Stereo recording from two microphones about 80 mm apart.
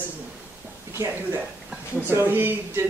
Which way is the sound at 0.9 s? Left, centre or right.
Right.